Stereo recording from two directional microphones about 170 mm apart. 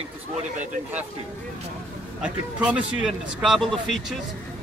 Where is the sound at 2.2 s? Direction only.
5° right (ahead or behind).